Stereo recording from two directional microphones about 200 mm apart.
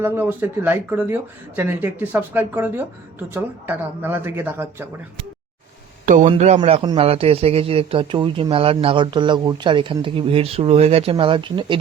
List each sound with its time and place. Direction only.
0.0 s speech: 10° right (ahead or behind)
6.1 s a man's voice: 35° right (ahead or behind)